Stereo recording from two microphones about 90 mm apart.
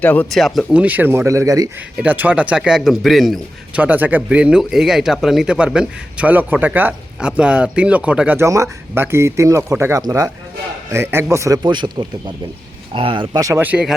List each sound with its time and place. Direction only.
0.0 s speech: 20° left (ahead or behind)
0.3 s speech: centre (ahead or behind)
0.7 s speech: 15° right (ahead or behind); by 1.7 s 35° right (ahead or behind)
2.0 s speech: 20° right (ahead or behind); by 3.4 s centre (ahead or behind)
3.8 s speech: 20° right (ahead or behind)
8.4 s speech: 35° right (ahead or behind)
11.6 s speech: 55° right (ahead or behind)
12.9 s speech: 75° right (ahead or behind)
13.3 s speech: 40° right (ahead or behind)
13.6 s speech: 20° right (ahead or behind)